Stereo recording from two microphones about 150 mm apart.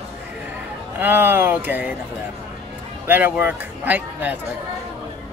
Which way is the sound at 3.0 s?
10° right (ahead or behind).